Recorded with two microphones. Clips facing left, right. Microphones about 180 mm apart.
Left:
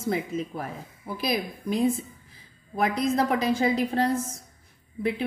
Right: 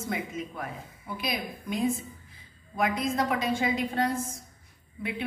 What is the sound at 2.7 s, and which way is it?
A woman's voice, 35° left (ahead or behind).